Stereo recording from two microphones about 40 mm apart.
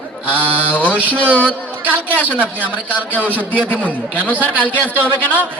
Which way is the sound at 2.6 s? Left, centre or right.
Left.